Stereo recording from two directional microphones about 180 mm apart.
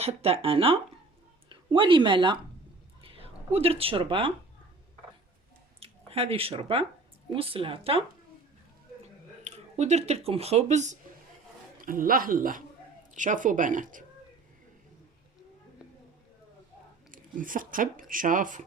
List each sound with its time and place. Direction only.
0.0 s speech: 35° right (ahead or behind)
5.8 s speech: 35° right (ahead or behind)
9.4 s speech: 40° right (ahead or behind)
11.8 s a man's voice: 50° right (ahead or behind)
17.1 s speech: 50° right (ahead or behind)